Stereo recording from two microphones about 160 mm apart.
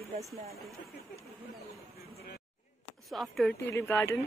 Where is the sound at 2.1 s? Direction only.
90° left.